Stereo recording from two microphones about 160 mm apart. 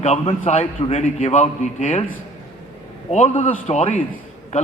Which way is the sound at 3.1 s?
40° left (ahead or behind).